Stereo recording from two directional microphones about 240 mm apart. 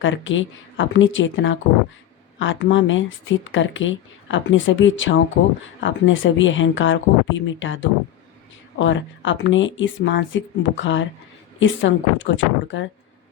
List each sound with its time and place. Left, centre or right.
0.0 s speech: left